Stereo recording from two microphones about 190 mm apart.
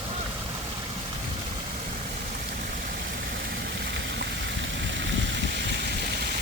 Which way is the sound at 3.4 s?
55° right (ahead or behind).